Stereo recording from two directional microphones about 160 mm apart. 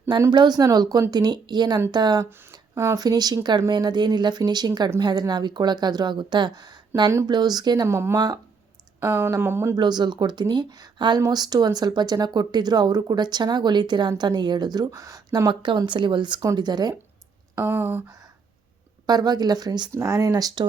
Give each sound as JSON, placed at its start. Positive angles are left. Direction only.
{"t": 0.1, "sound": "speech", "side_deg": -25}
{"t": 9.8, "sound": "speech", "side_deg": -25}
{"t": 17.5, "sound": "speech", "side_deg": -15}
{"t": 19.0, "sound": "speech", "side_deg": -25}